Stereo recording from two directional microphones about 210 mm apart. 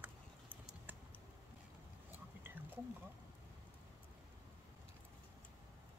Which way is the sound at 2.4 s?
10° right (ahead or behind).